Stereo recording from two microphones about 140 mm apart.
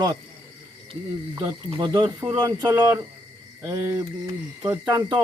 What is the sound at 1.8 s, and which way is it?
Speech, 30° right (ahead or behind).